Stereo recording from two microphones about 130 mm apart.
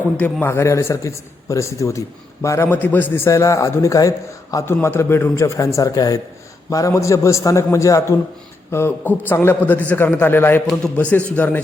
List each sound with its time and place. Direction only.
0.2 s a man's voice: 15° left (ahead or behind)